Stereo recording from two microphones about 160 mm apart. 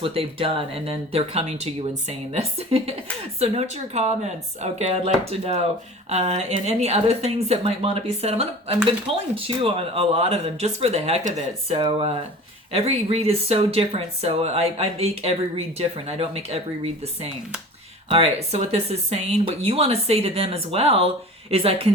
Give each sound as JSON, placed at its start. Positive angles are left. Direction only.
{"t": 0.0, "sound": "speech", "side_deg": -35}